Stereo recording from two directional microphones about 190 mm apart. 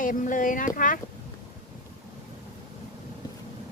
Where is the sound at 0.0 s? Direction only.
45° left (ahead or behind).